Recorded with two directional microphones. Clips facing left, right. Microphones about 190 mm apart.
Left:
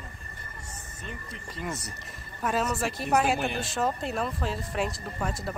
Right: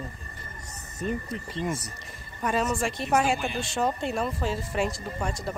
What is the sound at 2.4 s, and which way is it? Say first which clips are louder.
Speech: right 1 dB; centre (ahead or behind).